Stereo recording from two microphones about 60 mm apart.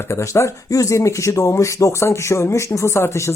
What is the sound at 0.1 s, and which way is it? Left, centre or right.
Speech, left.